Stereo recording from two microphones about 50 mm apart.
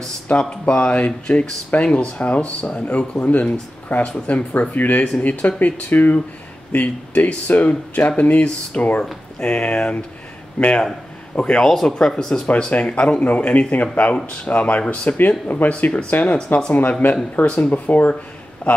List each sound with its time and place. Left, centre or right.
0.3 s speech: left
11.6 s speech: centre
12.4 s speech: left
14.1 s speech: centre
14.5 s speech: left
17.0 s speech: left
17.5 s speech: left
18.6 s speech: left